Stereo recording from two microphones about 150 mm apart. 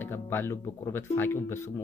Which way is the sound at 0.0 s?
15° left (ahead or behind).